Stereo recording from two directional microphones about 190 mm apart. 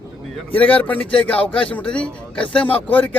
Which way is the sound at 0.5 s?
10° left (ahead or behind).